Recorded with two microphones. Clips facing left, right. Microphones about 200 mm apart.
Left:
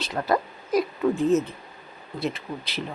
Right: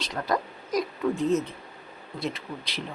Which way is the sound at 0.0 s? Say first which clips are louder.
Left 3 dB; 5° left (ahead or behind).